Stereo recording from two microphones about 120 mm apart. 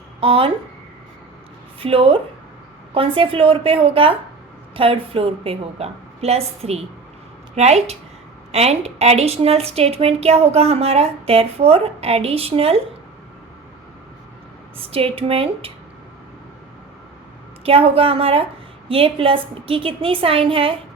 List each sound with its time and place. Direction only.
0.2 s a woman's voice: 50° right (ahead or behind)
1.8 s a woman's voice: 50° right (ahead or behind)
14.8 s a woman's voice: 55° right (ahead or behind)
17.7 s a woman's voice: 50° right (ahead or behind)